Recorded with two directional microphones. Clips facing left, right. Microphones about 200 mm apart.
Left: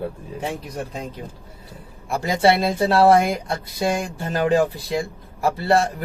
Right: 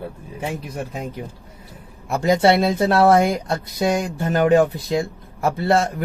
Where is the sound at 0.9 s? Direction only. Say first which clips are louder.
Right 2 dB; 10° right (ahead or behind).